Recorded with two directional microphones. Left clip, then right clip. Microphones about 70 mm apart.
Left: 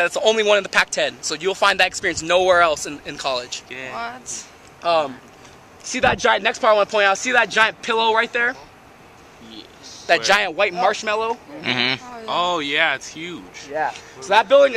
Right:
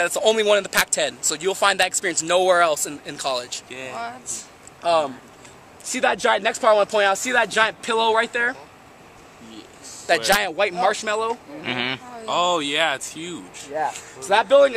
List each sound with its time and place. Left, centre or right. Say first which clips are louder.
0.0 s speech: left 2 dB; left
3.6 s speech: left 2 dB; right
3.9 s speech: left 2 dB; left
10.0 s speech: left 2 dB; left
11.6 s speech: left 5 dB; left
12.3 s speech: even; right
14.2 s speech: left 2 dB; left